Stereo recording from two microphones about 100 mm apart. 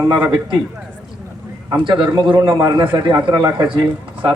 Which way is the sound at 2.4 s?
35° right (ahead or behind).